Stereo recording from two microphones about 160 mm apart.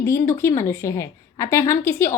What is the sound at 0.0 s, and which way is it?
A woman's voice, 15° left (ahead or behind).